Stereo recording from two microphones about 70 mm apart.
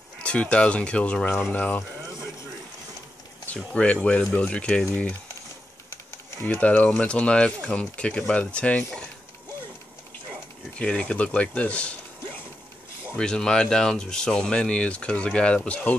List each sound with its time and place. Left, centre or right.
0.2 s speech: centre
3.7 s speech: centre
6.5 s speech: centre
10.8 s speech: centre
13.2 s speech: centre